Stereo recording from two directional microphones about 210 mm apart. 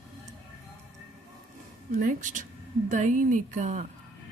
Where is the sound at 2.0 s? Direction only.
40° right (ahead or behind).